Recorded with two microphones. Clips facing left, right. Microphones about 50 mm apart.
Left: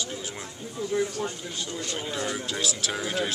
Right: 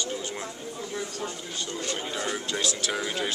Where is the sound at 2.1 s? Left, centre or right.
Centre.